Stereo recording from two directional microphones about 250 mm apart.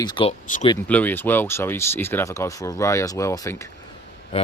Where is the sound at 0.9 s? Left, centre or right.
Centre.